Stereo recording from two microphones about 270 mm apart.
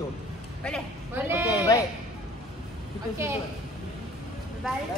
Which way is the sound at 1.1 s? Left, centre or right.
Centre.